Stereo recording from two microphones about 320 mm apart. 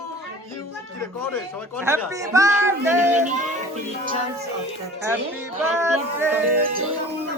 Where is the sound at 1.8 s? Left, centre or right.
Centre.